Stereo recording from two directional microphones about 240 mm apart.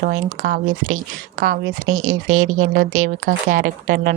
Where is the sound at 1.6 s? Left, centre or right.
Right.